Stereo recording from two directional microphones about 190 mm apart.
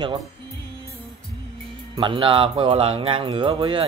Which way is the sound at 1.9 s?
25° right (ahead or behind).